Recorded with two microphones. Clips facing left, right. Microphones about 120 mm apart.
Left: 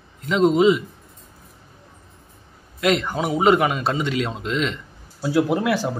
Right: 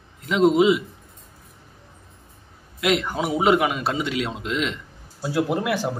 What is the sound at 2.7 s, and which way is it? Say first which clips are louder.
A man's voice: left 2 dB; 5° right (ahead or behind).